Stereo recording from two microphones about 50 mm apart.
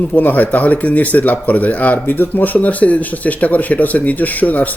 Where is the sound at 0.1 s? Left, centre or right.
Left.